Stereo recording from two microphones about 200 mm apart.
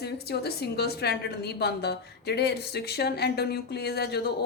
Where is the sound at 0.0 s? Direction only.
55° left (ahead or behind).